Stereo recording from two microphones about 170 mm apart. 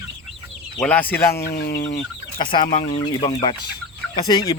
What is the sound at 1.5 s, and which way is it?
Speech, 65° left (ahead or behind).